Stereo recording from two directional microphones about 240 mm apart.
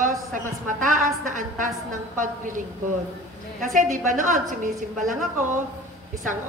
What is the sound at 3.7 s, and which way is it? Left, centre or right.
A woman's voice, right.